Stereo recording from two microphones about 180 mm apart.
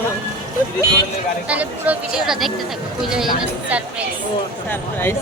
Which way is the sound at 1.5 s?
10° right (ahead or behind).